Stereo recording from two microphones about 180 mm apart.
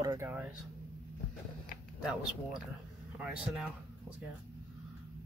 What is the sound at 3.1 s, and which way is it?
Speech, 5° right (ahead or behind).